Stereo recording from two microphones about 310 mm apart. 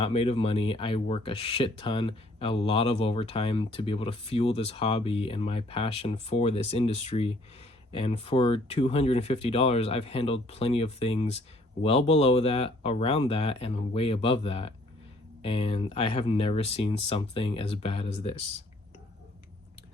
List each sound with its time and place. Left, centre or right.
0.0 s speech: centre